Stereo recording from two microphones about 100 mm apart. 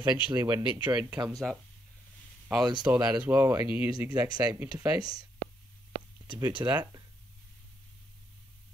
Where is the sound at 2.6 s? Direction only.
45° right (ahead or behind).